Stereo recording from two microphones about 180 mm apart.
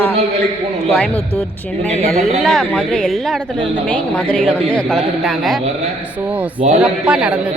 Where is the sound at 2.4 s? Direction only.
Centre (ahead or behind).